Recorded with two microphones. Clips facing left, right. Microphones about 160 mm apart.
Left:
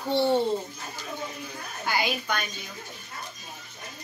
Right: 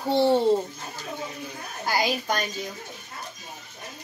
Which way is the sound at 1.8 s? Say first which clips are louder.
Right 3 dB; 40° right (ahead or behind).